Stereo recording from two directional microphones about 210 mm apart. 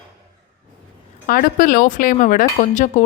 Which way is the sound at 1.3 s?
40° left (ahead or behind).